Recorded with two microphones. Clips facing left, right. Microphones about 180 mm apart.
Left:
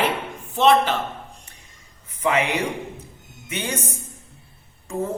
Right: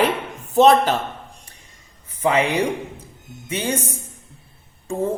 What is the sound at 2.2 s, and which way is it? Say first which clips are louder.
Speech: right 3 dB; 30° right (ahead or behind).